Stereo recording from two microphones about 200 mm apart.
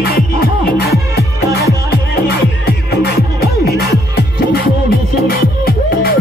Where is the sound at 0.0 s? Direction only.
50° left (ahead or behind).